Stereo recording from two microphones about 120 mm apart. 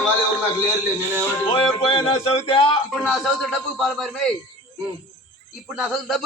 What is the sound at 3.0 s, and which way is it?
A man's voice, 5° right (ahead or behind).